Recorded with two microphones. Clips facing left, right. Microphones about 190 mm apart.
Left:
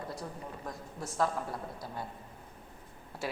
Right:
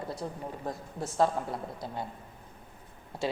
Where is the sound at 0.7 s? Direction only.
25° right (ahead or behind).